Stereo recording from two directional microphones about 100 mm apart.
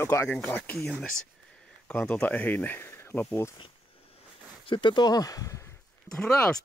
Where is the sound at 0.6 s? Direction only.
10° left (ahead or behind).